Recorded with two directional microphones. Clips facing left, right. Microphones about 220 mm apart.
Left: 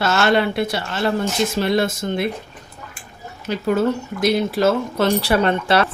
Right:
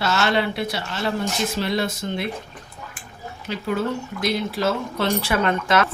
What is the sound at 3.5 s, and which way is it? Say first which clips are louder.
Speech: left 6 dB; 45° left (ahead or behind).